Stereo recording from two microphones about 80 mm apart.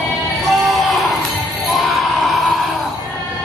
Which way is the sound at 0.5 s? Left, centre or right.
Centre.